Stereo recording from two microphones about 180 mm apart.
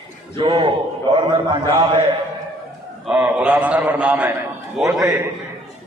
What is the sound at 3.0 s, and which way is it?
A man's voice, 5° right (ahead or behind).